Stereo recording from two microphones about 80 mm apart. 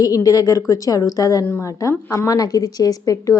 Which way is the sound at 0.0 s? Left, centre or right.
Left.